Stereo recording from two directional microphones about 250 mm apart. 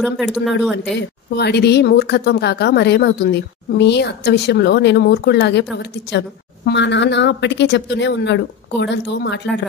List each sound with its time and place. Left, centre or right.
0.0 s speech: centre
0.9 s a woman's voice: left